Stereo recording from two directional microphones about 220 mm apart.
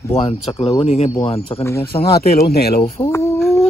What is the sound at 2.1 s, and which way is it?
Speech, 45° left (ahead or behind).